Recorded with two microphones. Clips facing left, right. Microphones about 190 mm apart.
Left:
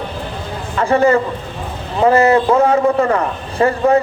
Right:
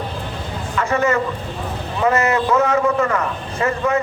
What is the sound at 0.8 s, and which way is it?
A man's voice, 30° left (ahead or behind).